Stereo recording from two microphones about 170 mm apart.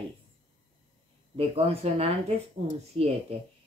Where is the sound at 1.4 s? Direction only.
35° right (ahead or behind).